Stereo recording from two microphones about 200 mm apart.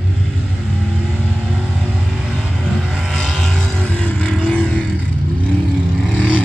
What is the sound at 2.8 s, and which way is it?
Vehicle, centre (ahead or behind).